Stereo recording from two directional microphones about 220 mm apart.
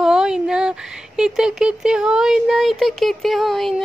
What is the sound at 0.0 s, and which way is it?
Speech, 5° right (ahead or behind).